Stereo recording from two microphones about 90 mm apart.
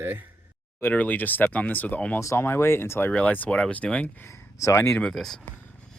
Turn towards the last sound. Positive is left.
turn(degrees=5)  # may be behind; listen again after turning